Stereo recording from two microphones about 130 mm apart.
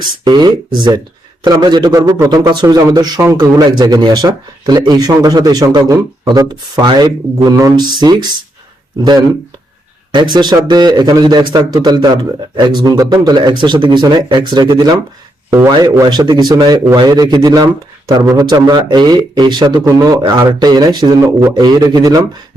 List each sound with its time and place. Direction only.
0.3 s a man's voice: 35° right (ahead or behind)
10.5 s a man's voice: 30° right (ahead or behind)
15.4 s speech: 20° right (ahead or behind)
15.7 s a man's voice: 35° right (ahead or behind)